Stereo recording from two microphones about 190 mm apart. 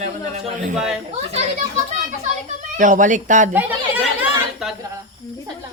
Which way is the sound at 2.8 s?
40° right (ahead or behind).